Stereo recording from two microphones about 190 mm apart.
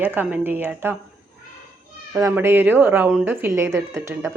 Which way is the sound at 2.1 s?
15° right (ahead or behind).